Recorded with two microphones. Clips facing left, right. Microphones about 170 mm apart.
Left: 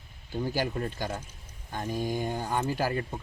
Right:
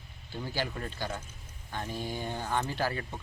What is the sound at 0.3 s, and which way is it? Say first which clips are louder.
Speech: left 7 dB; 15° left (ahead or behind).